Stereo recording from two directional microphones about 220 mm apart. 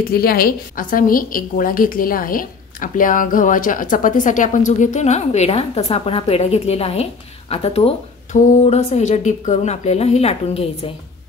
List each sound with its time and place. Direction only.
0.0 s a woman's voice: 40° left (ahead or behind); by 10.9 s 25° left (ahead or behind)